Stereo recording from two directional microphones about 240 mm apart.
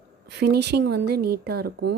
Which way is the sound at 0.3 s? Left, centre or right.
Right.